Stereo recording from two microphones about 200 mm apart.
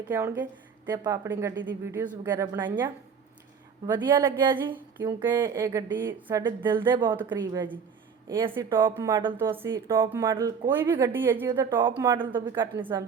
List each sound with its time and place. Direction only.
0.1 s speech: 15° right (ahead or behind)
3.8 s speech: 15° right (ahead or behind)